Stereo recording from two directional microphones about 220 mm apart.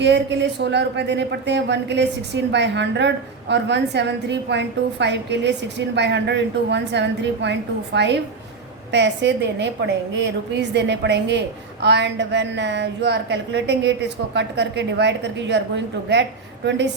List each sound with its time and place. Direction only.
0.0 s speech: 50° right (ahead or behind)